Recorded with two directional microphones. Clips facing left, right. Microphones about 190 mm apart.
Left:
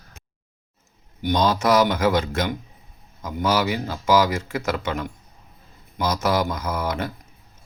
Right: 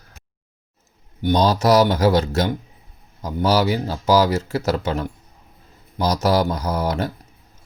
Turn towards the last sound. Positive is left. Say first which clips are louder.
# right 3 dB
turn(degrees=-40)  # may be behind; listen again after turning